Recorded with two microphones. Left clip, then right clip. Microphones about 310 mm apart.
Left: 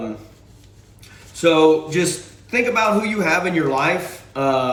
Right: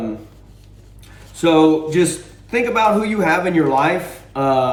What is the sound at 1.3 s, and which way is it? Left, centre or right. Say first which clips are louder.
Speech: even; centre.